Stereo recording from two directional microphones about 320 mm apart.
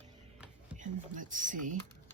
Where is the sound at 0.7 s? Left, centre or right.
Right.